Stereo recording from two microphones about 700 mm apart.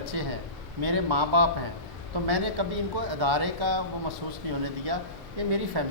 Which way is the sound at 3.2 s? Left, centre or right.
Right.